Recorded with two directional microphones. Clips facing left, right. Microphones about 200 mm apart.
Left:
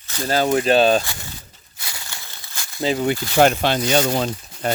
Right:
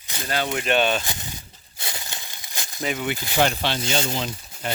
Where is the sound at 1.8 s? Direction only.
20° right (ahead or behind).